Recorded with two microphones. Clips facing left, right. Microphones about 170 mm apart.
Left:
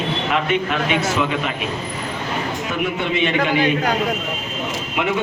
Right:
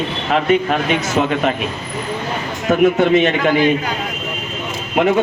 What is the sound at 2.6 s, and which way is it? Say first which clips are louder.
Speech: right 14 dB; 45° right (ahead or behind).